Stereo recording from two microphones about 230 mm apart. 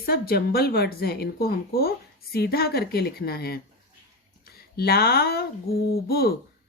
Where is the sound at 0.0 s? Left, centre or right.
Left.